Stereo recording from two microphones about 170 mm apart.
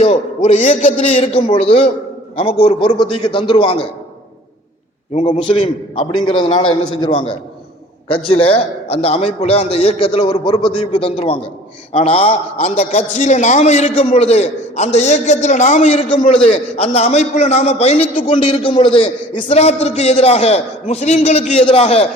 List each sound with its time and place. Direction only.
0.0 s a man's voice: 40° left (ahead or behind)
2.3 s a man's voice: 30° left (ahead or behind)
5.1 s a man's voice: 40° left (ahead or behind)
5.4 s a man's voice: 30° left (ahead or behind)
16.1 s a man's voice: 30° left (ahead or behind)
18.3 s a man's voice: 30° left (ahead or behind)